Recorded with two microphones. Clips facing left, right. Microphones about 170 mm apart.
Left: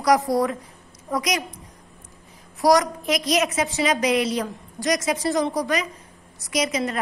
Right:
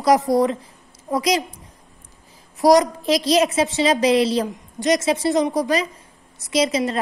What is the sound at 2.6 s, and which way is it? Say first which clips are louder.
A woman's voice: right 4 dB; 20° right (ahead or behind).